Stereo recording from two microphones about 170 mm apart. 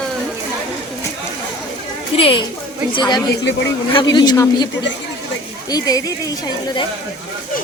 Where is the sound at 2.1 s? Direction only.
35° left (ahead or behind).